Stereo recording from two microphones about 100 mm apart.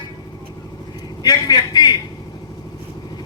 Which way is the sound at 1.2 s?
40° left (ahead or behind).